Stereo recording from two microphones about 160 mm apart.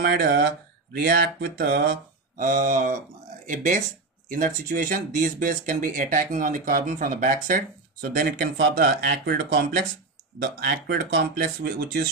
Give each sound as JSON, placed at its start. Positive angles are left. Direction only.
{"t": 0.0, "sound": "speech", "side_deg": -75}